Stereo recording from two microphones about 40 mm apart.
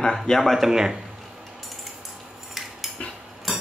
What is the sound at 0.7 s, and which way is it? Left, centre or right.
Speech, centre.